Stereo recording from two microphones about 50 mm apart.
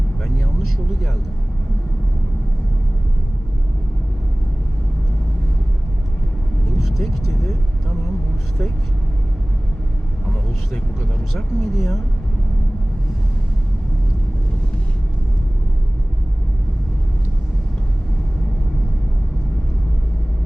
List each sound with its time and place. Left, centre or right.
6.7 s vehicle: centre
11.3 s speech: centre